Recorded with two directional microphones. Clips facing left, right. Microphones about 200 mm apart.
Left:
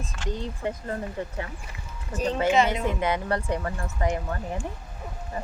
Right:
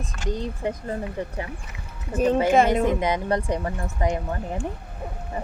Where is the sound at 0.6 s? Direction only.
20° right (ahead or behind).